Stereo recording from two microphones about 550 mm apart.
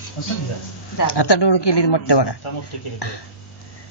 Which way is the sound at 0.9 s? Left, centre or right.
Left.